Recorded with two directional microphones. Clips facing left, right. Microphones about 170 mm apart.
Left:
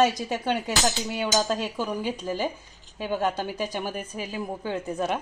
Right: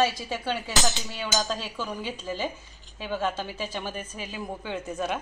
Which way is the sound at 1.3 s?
20° left (ahead or behind).